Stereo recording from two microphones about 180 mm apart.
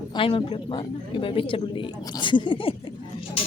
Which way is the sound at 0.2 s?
30° left (ahead or behind).